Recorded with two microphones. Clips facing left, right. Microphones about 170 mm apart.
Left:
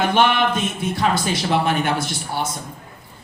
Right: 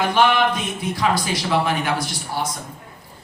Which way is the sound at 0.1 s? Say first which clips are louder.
Even; 25° left (ahead or behind).